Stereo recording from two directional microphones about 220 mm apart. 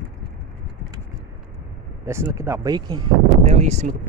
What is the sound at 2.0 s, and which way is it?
Speech, 10° right (ahead or behind).